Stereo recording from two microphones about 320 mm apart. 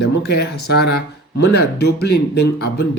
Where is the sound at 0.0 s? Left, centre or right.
Left.